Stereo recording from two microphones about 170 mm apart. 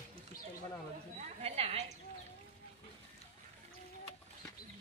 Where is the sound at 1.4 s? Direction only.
35° right (ahead or behind).